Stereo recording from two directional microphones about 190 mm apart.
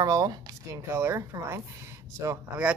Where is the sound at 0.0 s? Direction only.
20° right (ahead or behind).